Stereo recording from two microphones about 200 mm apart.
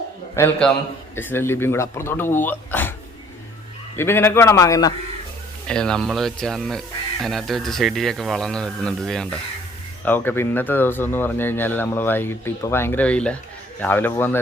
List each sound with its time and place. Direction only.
0.3 s speech: 10° left (ahead or behind)
3.9 s speech: 10° left (ahead or behind)
5.6 s speech: 5° left (ahead or behind)